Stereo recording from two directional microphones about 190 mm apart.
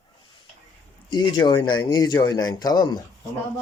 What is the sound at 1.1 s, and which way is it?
Speech, 25° left (ahead or behind).